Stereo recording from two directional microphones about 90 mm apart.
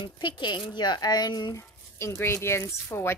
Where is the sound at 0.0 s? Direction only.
65° left (ahead or behind); by 1.6 s 45° left (ahead or behind).